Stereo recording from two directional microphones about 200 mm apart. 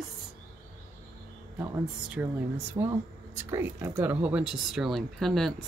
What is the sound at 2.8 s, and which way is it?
Speech, 20° right (ahead or behind).